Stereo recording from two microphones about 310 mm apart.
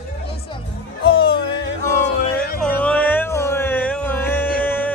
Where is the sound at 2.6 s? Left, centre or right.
Centre.